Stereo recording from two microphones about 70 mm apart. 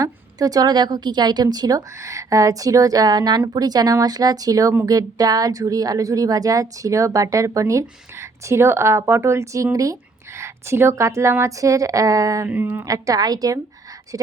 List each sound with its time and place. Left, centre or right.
0.0 s speech: right
2.0 s speech: right
3.4 s speech: right
12.5 s speech: right
12.8 s speech: right